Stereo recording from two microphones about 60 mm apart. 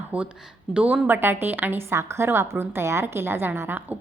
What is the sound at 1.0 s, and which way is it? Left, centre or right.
Speech, right.